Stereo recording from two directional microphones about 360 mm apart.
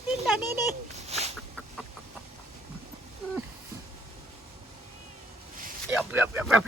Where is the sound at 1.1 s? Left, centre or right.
Centre.